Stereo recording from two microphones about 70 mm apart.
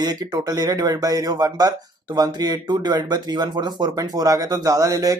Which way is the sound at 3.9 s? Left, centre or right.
Right.